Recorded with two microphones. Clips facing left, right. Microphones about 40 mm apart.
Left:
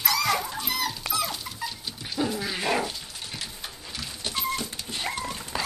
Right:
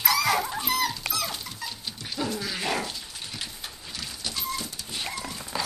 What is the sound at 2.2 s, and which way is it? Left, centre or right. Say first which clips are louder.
Dog: left 1 dB; centre.